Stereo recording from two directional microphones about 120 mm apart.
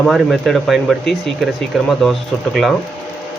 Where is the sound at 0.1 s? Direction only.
Centre (ahead or behind).